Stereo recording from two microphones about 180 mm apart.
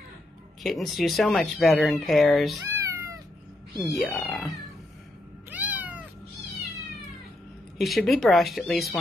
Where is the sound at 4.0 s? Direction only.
Centre (ahead or behind).